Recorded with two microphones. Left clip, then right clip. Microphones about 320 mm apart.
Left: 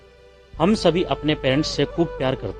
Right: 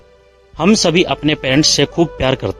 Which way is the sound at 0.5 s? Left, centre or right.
Centre.